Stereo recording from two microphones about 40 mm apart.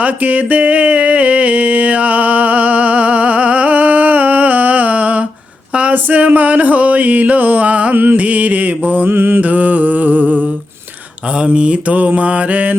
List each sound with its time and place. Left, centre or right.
0.0 s a sound: right
5.9 s music: right
7.9 s music: right
8.2 s mantra: right
9.0 s mantra: right
9.4 s music: right
11.5 s mantra: right